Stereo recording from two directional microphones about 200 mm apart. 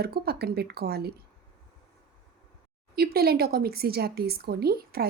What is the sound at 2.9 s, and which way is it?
A woman's voice, 50° right (ahead or behind).